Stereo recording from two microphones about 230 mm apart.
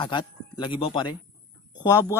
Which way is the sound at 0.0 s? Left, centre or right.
Left.